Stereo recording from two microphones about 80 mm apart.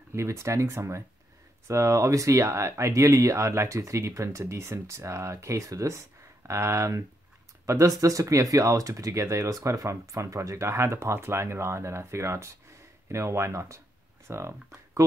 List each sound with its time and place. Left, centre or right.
0.1 s speech: right